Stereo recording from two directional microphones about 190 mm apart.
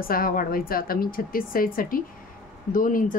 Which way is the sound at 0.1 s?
50° left (ahead or behind).